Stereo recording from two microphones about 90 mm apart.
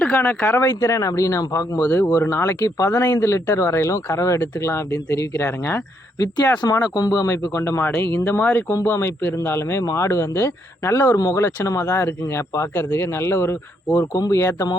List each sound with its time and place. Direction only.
0.0 s speech: 20° left (ahead or behind)
0.6 s speech: 35° left (ahead or behind)
6.1 s a man's voice: 45° left (ahead or behind)